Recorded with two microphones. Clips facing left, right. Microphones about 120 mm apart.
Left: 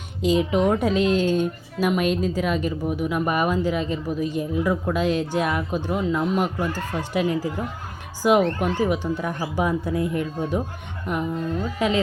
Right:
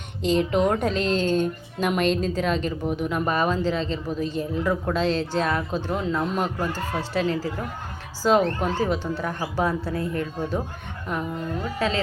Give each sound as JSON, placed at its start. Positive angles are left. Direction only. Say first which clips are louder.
{"t": 0.2, "sound": "speech", "louder": "left 1 dB", "side_deg": 5}
{"t": 11.8, "sound": "speech", "louder": "left 3 dB", "side_deg": 20}